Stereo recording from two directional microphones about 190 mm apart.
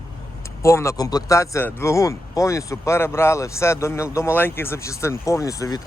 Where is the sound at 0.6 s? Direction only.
15° left (ahead or behind).